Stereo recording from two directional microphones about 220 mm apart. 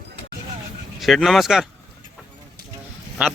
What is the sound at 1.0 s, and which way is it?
Speech, centre (ahead or behind).